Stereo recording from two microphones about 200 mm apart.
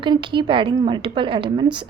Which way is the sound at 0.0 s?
25° right (ahead or behind).